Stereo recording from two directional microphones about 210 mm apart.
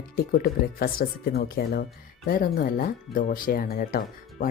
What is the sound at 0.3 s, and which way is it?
Speech, 45° left (ahead or behind).